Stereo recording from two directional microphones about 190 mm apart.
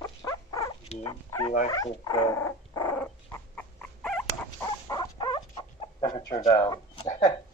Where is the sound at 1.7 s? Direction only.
20° left (ahead or behind); by 4.3 s 5° left (ahead or behind).